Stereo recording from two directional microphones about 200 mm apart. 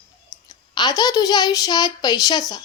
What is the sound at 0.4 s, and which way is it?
A child's voice, 20° left (ahead or behind).